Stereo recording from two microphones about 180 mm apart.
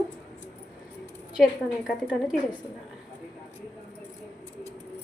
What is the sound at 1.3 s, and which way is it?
Speech, centre (ahead or behind).